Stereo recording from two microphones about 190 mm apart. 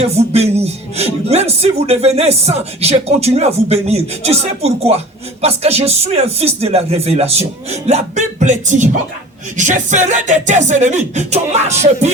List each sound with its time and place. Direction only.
0.0 s speech: 35° right (ahead or behind)